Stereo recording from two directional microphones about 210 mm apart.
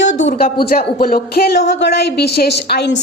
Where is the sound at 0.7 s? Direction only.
45° left (ahead or behind).